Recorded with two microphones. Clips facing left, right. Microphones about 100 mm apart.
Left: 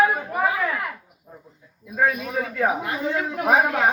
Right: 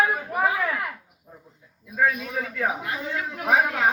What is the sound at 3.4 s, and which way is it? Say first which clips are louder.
Speech: left 2 dB; 40° left (ahead or behind).